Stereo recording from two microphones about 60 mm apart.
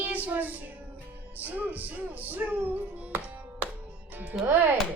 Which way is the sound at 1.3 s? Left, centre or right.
Right.